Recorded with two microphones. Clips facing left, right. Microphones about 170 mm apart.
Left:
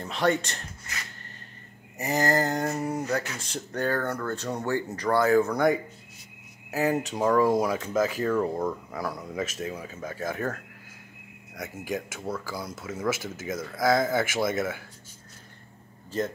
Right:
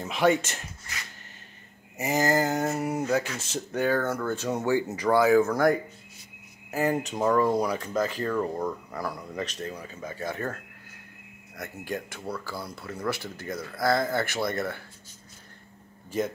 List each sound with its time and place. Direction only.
0.0 s speech: 10° right (ahead or behind)
2.0 s speech: 5° right (ahead or behind)
6.7 s speech: 5° left (ahead or behind)